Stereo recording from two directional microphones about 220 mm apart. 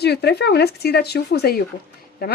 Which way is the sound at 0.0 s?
50° left (ahead or behind).